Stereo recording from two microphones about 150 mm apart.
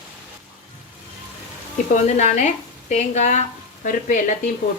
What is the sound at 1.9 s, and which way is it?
A woman's voice, 55° left (ahead or behind).